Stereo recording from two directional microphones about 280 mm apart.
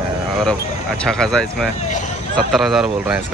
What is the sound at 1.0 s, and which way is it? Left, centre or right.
Speech, centre.